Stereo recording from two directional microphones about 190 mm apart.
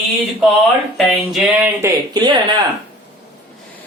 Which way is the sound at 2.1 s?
20° right (ahead or behind).